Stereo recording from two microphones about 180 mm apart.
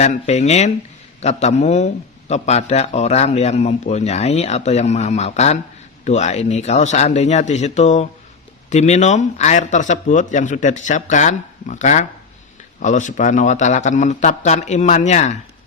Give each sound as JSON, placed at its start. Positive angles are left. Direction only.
{"t": 0.0, "sound": "a man's voice", "side_deg": 40}